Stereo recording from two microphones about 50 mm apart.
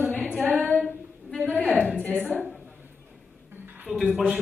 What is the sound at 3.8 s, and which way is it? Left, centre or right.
Speech, centre.